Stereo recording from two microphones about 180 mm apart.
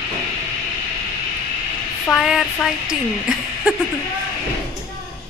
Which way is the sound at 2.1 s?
Centre (ahead or behind).